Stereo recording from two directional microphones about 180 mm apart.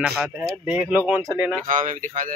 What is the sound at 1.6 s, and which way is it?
Speech, 45° right (ahead or behind).